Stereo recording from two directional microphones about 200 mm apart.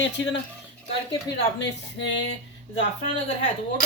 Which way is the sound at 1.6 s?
65° left (ahead or behind).